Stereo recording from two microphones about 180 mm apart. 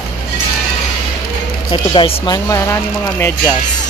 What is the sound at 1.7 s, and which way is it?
Speech, 30° left (ahead or behind).